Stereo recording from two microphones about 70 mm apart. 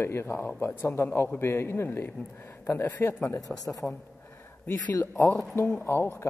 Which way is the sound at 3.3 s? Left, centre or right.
Left.